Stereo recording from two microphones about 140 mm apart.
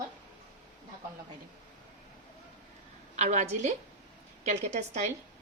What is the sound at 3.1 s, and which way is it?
A woman's voice, 55° right (ahead or behind).